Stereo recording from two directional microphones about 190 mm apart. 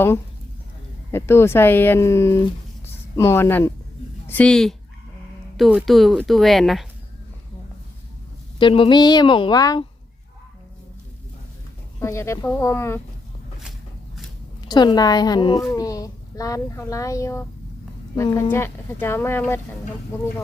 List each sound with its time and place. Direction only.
1.1 s a woman's voice: 10° left (ahead or behind)
8.5 s a woman's voice: 25° left (ahead or behind)
11.9 s a woman's voice: 15° left (ahead or behind)
14.6 s a woman's voice: 20° left (ahead or behind)